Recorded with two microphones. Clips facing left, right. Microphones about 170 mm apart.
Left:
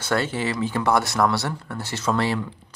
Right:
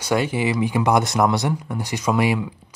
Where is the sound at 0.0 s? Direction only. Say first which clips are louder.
Right 3 dB; 10° right (ahead or behind).